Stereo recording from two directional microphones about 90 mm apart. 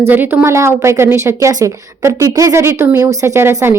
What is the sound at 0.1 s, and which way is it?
A woman's voice, 20° right (ahead or behind).